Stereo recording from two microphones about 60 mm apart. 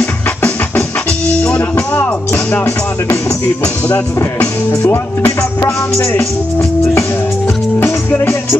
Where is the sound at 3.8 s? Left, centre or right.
Left.